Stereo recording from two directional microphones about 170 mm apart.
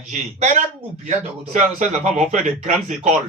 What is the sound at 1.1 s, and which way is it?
A man's voice, 45° right (ahead or behind).